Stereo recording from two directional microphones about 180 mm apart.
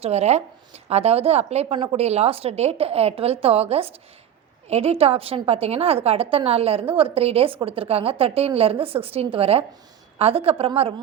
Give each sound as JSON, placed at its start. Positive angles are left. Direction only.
{"t": 0.0, "sound": "a woman's voice", "side_deg": -35}